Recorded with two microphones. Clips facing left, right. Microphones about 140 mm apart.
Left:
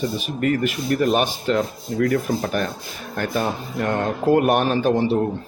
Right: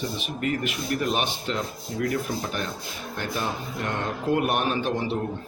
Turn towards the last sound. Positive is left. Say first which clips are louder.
# left 7 dB
turn(degrees=40)  # may be behind; listen again after turning